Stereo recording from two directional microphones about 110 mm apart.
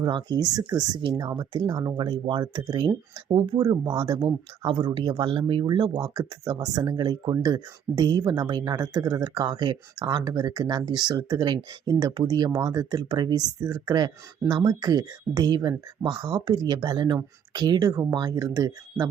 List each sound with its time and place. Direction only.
0.0 s speech: 40° right (ahead or behind)